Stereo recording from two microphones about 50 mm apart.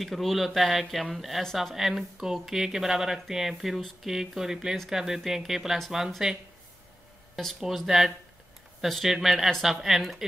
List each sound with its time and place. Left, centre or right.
0.0 s speech: centre
7.6 s speech: centre